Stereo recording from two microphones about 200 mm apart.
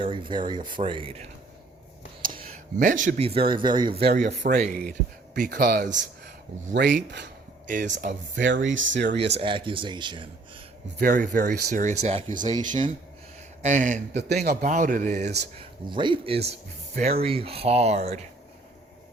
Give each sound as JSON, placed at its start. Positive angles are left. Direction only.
{"t": 0.0, "sound": "speech", "side_deg": -25}
{"t": 2.7, "sound": "speech", "side_deg": -40}
{"t": 4.1, "sound": "speech", "side_deg": -35}
{"t": 6.7, "sound": "speech", "side_deg": -55}
{"t": 7.7, "sound": "speech", "side_deg": -40}
{"t": 8.4, "sound": "speech", "side_deg": -70}
{"t": 9.0, "sound": "speech", "side_deg": -30}
{"t": 11.0, "sound": "speech", "side_deg": -40}
{"t": 13.6, "sound": "speech", "side_deg": -35}
{"t": 14.2, "sound": "speech", "side_deg": -55}
{"t": 15.9, "sound": "speech", "side_deg": -25}